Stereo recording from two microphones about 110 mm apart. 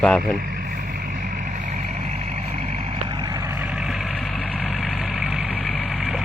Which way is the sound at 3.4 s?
20° right (ahead or behind).